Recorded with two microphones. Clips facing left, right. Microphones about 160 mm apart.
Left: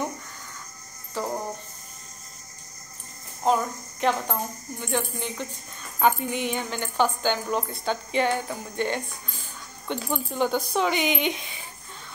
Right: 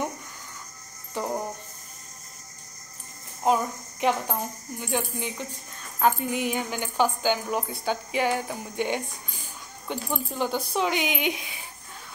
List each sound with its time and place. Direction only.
1.2 s speech: 20° right (ahead or behind)
3.4 s a woman's voice: 10° right (ahead or behind)